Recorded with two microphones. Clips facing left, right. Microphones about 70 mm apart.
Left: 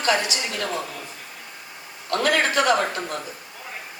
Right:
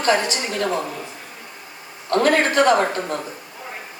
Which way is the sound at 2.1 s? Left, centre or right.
Right.